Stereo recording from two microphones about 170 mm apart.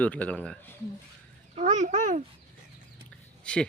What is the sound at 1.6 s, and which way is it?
Speech, 45° right (ahead or behind).